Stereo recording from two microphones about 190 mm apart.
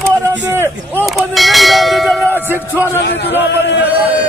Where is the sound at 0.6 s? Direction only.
10° left (ahead or behind).